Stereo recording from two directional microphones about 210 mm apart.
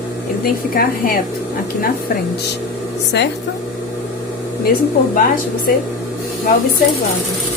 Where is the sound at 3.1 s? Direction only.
55° left (ahead or behind).